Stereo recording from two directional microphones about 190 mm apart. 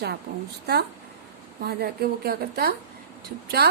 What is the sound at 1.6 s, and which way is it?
A woman's voice, 55° right (ahead or behind).